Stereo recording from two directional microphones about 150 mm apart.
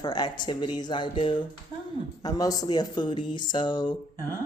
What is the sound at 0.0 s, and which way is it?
Speech, 30° left (ahead or behind).